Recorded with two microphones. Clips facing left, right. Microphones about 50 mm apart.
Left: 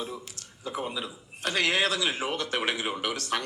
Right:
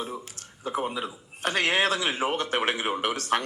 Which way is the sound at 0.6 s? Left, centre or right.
Right.